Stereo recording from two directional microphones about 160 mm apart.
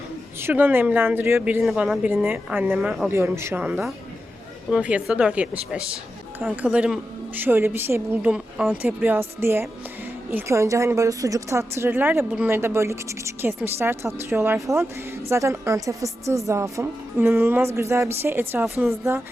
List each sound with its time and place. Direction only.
0.3 s a woman's voice: 15° right (ahead or behind)
1.6 s a woman's voice: centre (ahead or behind)